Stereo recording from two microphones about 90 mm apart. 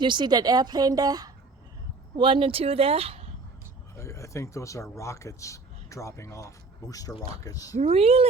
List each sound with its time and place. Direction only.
0.0 s a woman's voice: 60° right (ahead or behind)
2.1 s speech: 65° right (ahead or behind); by 3.2 s 90° right
3.9 s speech: 35° left (ahead or behind)
7.9 s speech: 90° right